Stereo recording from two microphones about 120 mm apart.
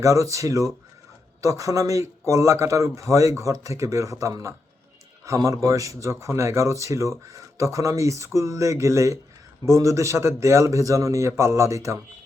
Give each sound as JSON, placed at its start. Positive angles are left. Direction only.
{"t": 0.0, "sound": "speech", "side_deg": -25}